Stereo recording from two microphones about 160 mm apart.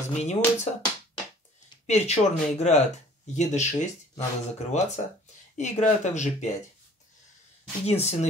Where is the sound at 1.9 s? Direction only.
45° left (ahead or behind).